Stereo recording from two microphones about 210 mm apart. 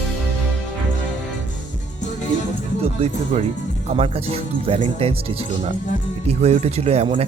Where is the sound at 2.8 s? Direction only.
30° right (ahead or behind).